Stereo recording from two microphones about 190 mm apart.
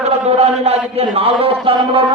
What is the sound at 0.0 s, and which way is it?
Chant, 35° right (ahead or behind).